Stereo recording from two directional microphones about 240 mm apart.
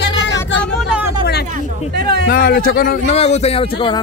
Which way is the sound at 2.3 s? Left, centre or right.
Left.